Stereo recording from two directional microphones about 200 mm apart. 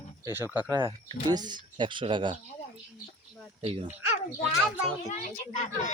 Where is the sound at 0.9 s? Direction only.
20° right (ahead or behind).